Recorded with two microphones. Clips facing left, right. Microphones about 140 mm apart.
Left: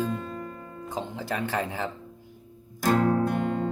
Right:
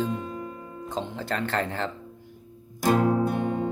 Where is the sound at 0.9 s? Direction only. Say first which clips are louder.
Right 1 dB; 15° left (ahead or behind).